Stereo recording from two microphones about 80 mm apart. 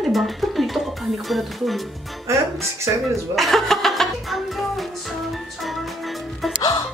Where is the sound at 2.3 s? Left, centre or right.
Right.